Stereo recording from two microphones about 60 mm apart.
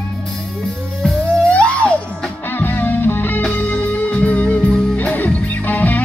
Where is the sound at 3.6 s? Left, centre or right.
Left.